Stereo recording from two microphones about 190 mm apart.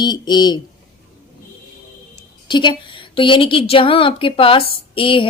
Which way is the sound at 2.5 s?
25° left (ahead or behind).